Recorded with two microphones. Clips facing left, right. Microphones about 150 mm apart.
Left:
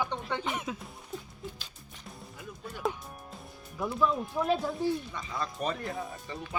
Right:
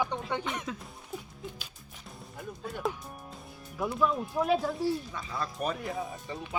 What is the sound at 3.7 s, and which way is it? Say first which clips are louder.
Speech: even; 5° right (ahead or behind).